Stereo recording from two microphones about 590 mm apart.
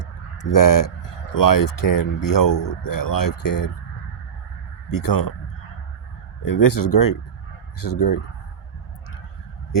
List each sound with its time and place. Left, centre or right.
0.0 s a sound: left
1.3 s speech: left
4.9 s speech: left
6.4 s speech: left